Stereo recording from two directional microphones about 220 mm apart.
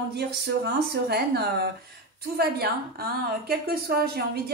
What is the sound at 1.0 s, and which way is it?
A woman's voice, 45° right (ahead or behind).